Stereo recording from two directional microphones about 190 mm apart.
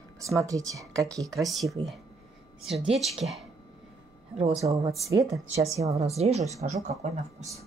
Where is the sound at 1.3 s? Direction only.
Centre (ahead or behind).